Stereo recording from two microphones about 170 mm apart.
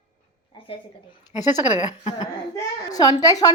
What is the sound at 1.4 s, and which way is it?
Speech, 20° left (ahead or behind).